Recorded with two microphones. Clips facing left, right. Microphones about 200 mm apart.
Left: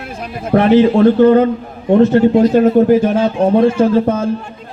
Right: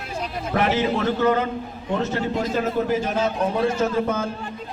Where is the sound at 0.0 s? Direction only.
55° left (ahead or behind).